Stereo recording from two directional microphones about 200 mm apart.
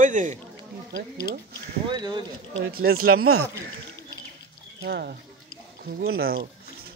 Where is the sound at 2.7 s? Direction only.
50° right (ahead or behind).